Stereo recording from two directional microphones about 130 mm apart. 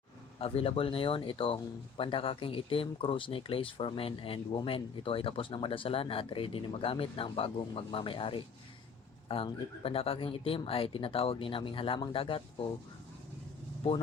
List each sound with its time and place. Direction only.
0.3 s speech: 45° left (ahead or behind)